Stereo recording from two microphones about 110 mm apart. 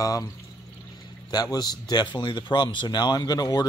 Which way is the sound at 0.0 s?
30° left (ahead or behind).